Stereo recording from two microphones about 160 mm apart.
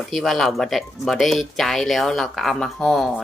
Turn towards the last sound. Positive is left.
turn(degrees=0)  # may be behind; listen again after turning